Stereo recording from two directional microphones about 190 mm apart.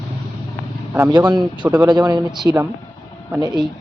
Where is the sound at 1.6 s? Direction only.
10° right (ahead or behind).